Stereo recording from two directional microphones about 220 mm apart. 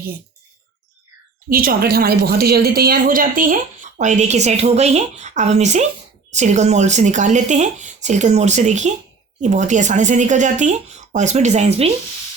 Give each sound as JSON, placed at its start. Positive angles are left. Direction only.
{"t": 1.5, "sound": "a woman's voice", "side_deg": -40}